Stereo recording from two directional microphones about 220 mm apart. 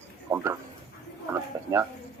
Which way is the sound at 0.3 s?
10° right (ahead or behind).